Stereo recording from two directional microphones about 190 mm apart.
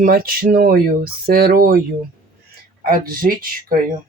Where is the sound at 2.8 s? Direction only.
50° right (ahead or behind).